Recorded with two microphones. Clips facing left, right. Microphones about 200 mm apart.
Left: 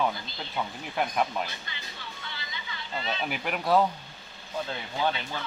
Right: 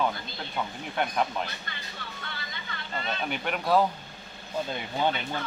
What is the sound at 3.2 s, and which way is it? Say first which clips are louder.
Speech: even; 5° left (ahead or behind).